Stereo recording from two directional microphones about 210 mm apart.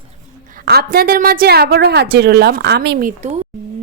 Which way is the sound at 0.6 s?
50° right (ahead or behind).